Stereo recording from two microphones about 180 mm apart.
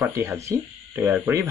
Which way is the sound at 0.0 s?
15° right (ahead or behind).